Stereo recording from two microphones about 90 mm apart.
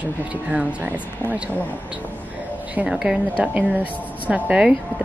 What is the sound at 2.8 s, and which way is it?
Speech, 10° right (ahead or behind).